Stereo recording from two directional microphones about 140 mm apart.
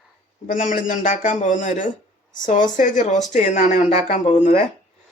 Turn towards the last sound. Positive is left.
turn(degrees=60)  # may be behind; listen again after turning